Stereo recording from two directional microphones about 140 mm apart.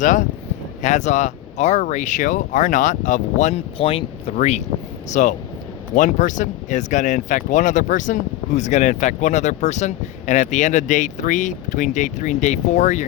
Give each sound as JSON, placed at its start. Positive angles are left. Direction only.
{"t": 0.0, "sound": "speech", "side_deg": 65}
{"t": 3.8, "sound": "speech", "side_deg": 40}
{"t": 4.4, "sound": "speech", "side_deg": 55}